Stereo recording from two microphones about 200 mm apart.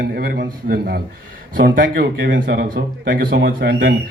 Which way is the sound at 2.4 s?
60° right (ahead or behind).